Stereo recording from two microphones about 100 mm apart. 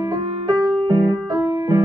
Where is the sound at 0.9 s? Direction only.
40° right (ahead or behind).